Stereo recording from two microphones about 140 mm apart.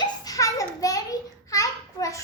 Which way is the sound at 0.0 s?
25° left (ahead or behind).